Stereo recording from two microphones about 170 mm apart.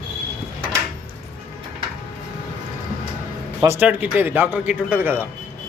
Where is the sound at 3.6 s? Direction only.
15° right (ahead or behind).